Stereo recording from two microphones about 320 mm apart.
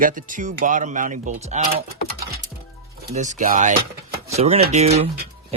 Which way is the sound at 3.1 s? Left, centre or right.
Right.